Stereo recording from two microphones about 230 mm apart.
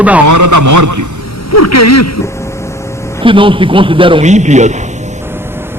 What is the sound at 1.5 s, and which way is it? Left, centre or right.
Speech, left.